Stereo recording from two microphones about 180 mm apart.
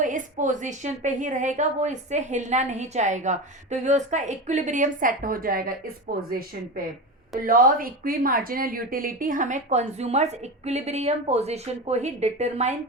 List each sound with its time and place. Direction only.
0.0 s a woman's voice: 45° right (ahead or behind)
7.4 s speech: 50° right (ahead or behind)